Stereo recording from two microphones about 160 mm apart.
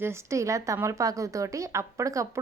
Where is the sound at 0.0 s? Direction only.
15° right (ahead or behind).